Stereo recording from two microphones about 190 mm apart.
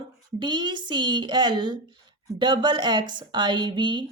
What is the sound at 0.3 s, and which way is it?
A woman's voice, 25° right (ahead or behind).